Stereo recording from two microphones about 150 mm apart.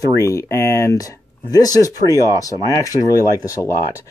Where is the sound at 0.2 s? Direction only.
20° left (ahead or behind).